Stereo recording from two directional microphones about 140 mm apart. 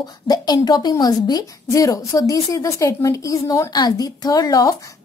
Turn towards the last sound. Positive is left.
turn(degrees=25)  # may be behind; listen again after turning